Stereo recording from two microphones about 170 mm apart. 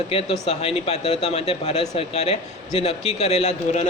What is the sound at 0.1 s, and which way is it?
A man's voice, 35° left (ahead or behind).